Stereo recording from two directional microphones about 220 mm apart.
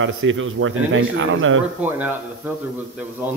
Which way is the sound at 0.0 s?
60° right (ahead or behind).